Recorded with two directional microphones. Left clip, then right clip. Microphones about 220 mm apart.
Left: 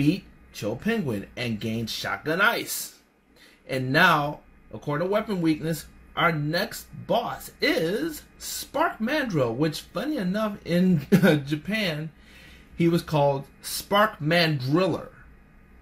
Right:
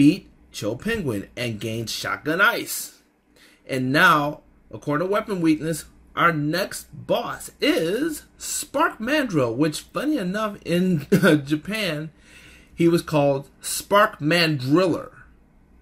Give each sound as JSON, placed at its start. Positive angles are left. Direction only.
{"t": 0.0, "sound": "speech", "side_deg": -40}